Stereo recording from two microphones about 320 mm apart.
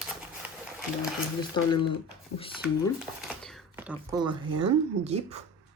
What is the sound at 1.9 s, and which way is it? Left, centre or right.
Speech, centre.